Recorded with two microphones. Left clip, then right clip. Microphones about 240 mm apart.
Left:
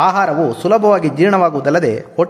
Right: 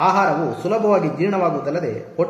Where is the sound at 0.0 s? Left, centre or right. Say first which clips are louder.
Left 4 dB; left.